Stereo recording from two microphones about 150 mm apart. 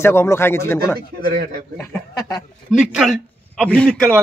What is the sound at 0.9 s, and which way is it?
Speech, 85° right.